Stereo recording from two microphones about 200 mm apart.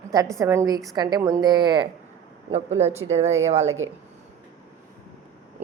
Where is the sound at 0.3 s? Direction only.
15° right (ahead or behind).